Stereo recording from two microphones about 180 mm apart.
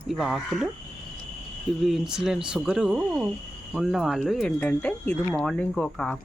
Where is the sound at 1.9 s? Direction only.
Centre (ahead or behind).